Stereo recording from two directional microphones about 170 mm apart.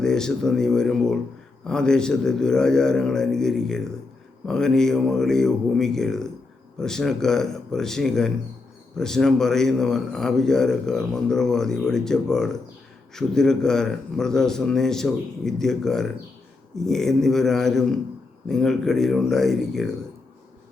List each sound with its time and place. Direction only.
0.0 s a man's voice: 5° left (ahead or behind)